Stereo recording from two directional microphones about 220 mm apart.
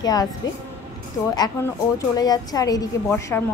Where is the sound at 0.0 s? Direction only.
15° left (ahead or behind).